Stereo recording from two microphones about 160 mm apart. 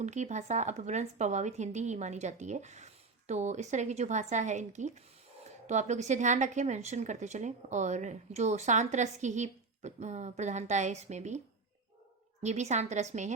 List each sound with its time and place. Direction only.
0.0 s a woman's voice: 45° right (ahead or behind)
12.4 s a woman's voice: 45° right (ahead or behind)